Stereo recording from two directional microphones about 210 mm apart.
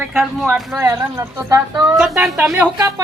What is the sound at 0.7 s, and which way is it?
Speech, 10° right (ahead or behind).